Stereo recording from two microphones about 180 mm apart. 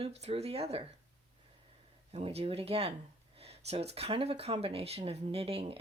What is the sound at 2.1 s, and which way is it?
Speech, 35° right (ahead or behind).